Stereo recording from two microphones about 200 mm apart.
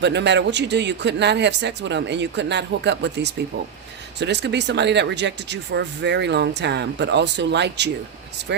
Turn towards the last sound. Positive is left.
turn(degrees=-60)  # may be behind; listen again after turning